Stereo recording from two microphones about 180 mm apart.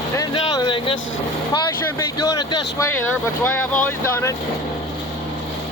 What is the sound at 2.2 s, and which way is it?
Speech, 20° left (ahead or behind).